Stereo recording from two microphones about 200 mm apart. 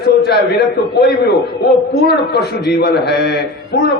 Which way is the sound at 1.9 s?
55° left (ahead or behind).